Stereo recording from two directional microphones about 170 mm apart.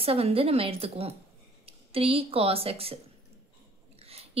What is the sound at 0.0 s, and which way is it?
A woman's voice, 35° right (ahead or behind).